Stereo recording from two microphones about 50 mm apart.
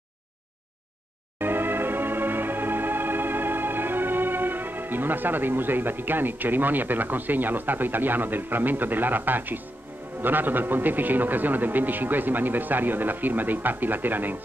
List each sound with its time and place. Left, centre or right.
1.4 s music: right
10.2 s a man's voice: right